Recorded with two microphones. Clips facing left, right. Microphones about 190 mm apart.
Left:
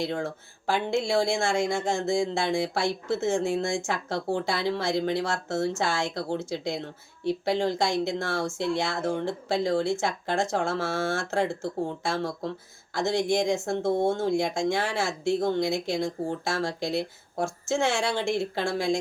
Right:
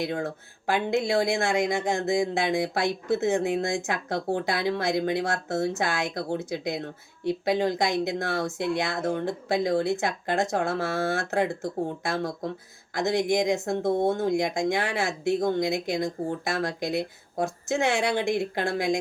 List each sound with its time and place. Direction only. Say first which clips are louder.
0.7 s speech: right 1 dB; 20° right (ahead or behind)